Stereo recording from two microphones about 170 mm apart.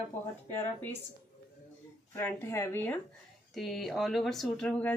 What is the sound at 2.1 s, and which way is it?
Speech, 15° left (ahead or behind).